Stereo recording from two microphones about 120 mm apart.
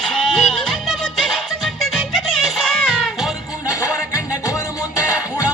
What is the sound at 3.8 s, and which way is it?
Music, 25° left (ahead or behind).